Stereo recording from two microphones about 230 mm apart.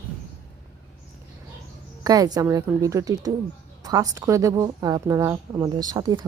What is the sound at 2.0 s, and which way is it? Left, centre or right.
Speech, centre.